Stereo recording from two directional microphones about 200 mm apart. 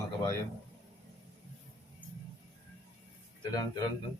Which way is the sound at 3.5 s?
20° left (ahead or behind).